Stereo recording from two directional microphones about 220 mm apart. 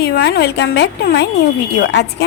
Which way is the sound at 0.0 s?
50° left (ahead or behind).